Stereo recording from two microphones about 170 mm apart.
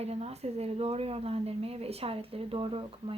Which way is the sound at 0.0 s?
40° right (ahead or behind).